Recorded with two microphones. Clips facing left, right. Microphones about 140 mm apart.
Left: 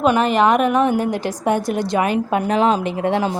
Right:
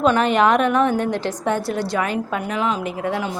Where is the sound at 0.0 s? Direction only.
5° left (ahead or behind).